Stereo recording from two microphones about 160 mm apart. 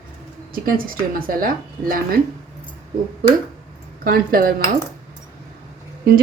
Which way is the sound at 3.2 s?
65° right (ahead or behind).